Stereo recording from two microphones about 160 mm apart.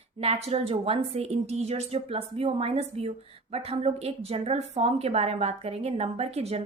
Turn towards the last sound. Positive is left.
turn(degrees=-40)  # may be behind; listen again after turning